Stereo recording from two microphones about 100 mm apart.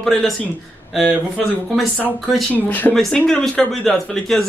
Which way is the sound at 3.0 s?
5° left (ahead or behind).